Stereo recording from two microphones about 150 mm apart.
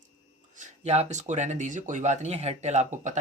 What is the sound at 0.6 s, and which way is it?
Speech, 45° right (ahead or behind).